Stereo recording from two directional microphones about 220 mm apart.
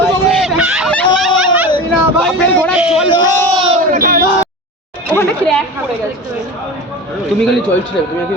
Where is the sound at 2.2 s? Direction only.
Centre (ahead or behind).